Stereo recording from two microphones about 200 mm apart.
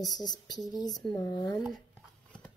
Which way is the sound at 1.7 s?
5° left (ahead or behind).